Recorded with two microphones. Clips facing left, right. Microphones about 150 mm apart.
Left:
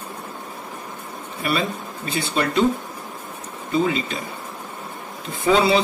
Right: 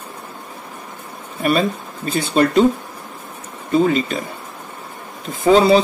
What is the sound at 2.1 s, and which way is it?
Speech, 45° right (ahead or behind).